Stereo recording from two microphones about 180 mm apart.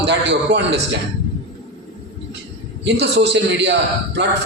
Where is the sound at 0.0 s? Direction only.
75° right (ahead or behind).